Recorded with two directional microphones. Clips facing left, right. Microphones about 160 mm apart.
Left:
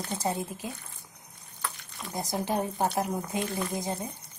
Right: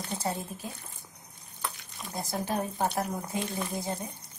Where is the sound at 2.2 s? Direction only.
15° left (ahead or behind).